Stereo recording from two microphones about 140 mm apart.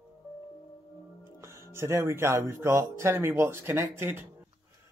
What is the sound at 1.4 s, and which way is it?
Speech, 20° right (ahead or behind).